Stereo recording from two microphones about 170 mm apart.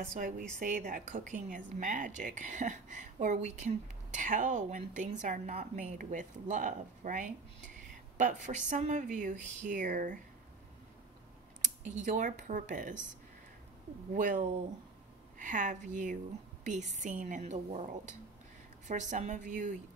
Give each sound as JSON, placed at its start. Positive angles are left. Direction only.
{"t": 0.2, "sound": "a woman's voice", "side_deg": -55}
{"t": 11.8, "sound": "a woman's voice", "side_deg": -45}
{"t": 14.1, "sound": "a woman's voice", "side_deg": -50}